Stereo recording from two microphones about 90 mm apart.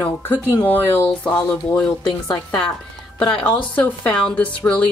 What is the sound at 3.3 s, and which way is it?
Speech, 15° left (ahead or behind).